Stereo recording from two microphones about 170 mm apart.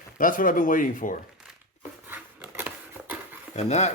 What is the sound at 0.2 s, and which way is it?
Speech, 55° left (ahead or behind).